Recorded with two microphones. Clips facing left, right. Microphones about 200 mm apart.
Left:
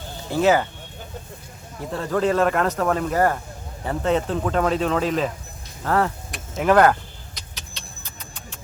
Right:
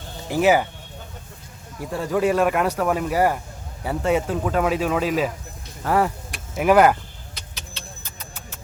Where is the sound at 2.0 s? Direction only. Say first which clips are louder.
Even; 10° right (ahead or behind).